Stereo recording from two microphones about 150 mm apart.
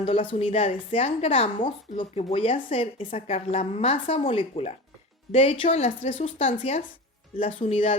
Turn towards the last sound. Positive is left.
turn(degrees=40)  # may be behind; listen again after turning